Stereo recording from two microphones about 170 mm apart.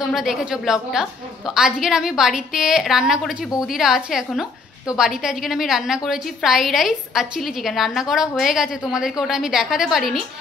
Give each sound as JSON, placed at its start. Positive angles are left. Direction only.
{"t": 0.0, "sound": "a woman's voice", "side_deg": 0}